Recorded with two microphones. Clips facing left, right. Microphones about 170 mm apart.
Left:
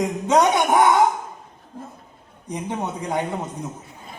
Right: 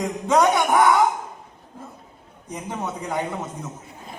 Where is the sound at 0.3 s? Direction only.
20° left (ahead or behind).